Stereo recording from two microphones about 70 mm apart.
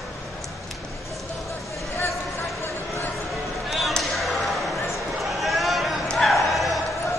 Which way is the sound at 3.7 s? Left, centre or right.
Centre.